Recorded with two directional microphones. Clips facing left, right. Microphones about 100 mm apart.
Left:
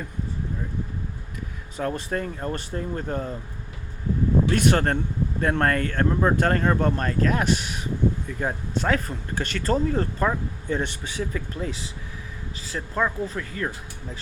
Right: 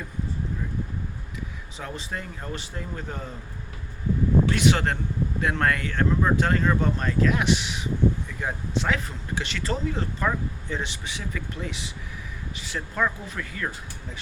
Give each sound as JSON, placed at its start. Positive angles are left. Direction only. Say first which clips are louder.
{"t": 1.7, "sound": "speech", "louder": "left 8 dB", "side_deg": 50}
{"t": 4.5, "sound": "speech", "louder": "left 2 dB", "side_deg": 50}
{"t": 11.2, "sound": "speech", "louder": "left 5 dB", "side_deg": 35}